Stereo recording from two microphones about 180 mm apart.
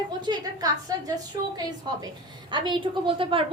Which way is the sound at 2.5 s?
25° right (ahead or behind).